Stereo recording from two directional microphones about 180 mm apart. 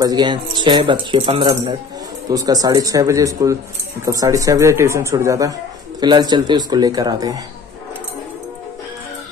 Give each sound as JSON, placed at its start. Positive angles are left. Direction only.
{"t": 0.0, "sound": "speech", "side_deg": -25}